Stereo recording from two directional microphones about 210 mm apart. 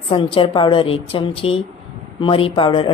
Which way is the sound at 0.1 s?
25° left (ahead or behind).